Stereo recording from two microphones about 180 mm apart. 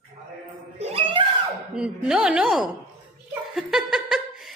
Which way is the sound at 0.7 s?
30° right (ahead or behind).